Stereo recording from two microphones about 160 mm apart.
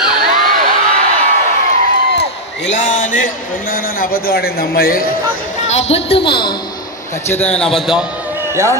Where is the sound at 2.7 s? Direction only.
50° left (ahead or behind).